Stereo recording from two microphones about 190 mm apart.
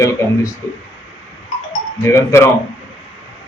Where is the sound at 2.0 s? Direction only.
15° left (ahead or behind).